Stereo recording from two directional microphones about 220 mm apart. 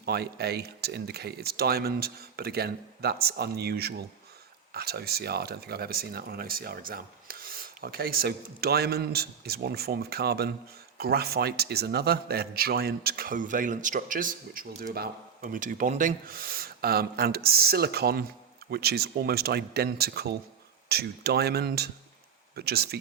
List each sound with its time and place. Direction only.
0.0 s a man's voice: 45° right (ahead or behind)